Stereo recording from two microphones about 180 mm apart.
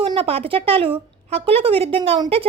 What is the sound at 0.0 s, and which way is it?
A woman's voice, 30° right (ahead or behind).